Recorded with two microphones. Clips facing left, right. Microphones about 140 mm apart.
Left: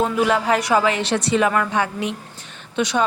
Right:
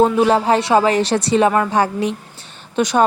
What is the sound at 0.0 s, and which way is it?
A woman's voice, 35° right (ahead or behind).